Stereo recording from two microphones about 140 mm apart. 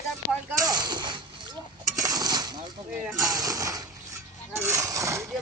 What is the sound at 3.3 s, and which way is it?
Speech, 25° right (ahead or behind).